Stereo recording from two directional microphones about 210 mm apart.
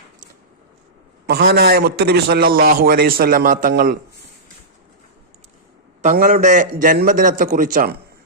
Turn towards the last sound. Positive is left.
turn(degrees=-40)  # may be behind; listen again after turning